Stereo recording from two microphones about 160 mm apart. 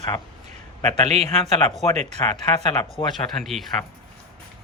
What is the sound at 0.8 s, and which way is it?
Speech, 45° right (ahead or behind).